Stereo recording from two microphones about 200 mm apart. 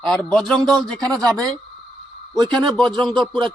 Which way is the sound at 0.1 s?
5° left (ahead or behind).